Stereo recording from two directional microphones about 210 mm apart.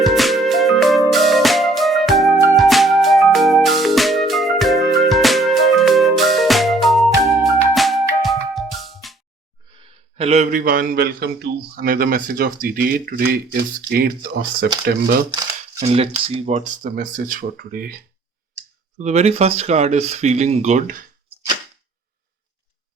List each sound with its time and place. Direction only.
0.0 s music: centre (ahead or behind)
10.2 s speech: 30° right (ahead or behind)
15.8 s speech: 30° right (ahead or behind); by 17.9 s 45° right (ahead or behind)
18.9 s speech: 35° right (ahead or behind)